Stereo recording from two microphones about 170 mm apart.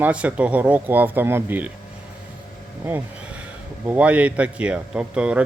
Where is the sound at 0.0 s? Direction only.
5° right (ahead or behind).